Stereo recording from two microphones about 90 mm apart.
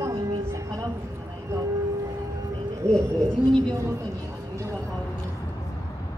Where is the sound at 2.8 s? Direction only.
35° right (ahead or behind).